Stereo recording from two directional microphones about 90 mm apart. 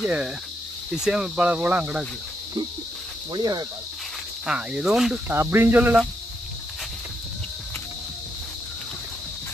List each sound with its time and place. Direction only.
0.0 s speech: 10° right (ahead or behind)
3.3 s speech: 50° right (ahead or behind)
4.5 s speech: 10° right (ahead or behind)
5.3 s speech: 25° right (ahead or behind)